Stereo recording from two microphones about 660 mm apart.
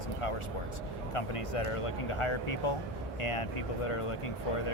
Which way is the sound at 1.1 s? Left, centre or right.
Left.